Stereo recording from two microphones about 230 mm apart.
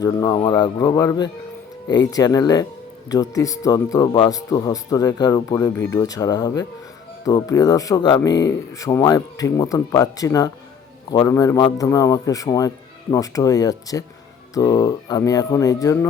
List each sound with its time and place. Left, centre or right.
0.0 s speech: centre